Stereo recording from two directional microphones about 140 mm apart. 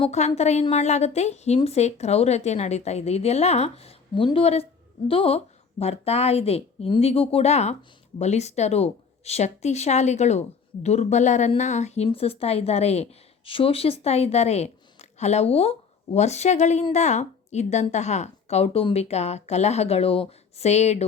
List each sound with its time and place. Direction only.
0.1 s a woman's voice: 55° left (ahead or behind)
12.0 s a woman's voice: 45° left (ahead or behind)